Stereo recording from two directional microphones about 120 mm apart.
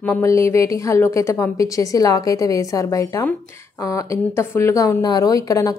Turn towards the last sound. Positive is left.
turn(degrees=30)  # may be behind; listen again after turning